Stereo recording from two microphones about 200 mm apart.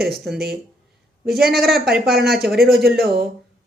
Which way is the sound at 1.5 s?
Centre (ahead or behind).